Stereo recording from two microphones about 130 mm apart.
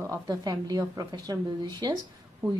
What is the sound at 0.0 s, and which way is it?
A woman's voice, 30° right (ahead or behind).